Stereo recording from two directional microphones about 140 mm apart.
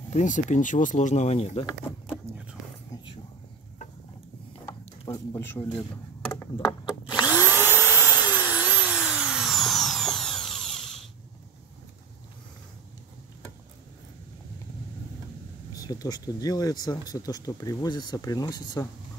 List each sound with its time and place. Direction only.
0.1 s speech: 60° left (ahead or behind)
5.0 s speech: 25° left (ahead or behind)
5.6 s speech: 40° left (ahead or behind)
7.2 s vacuum cleaner: 15° right (ahead or behind)
8.3 s tools: 15° right (ahead or behind); by 11.0 s 5° left (ahead or behind)
15.7 s speech: 25° left (ahead or behind)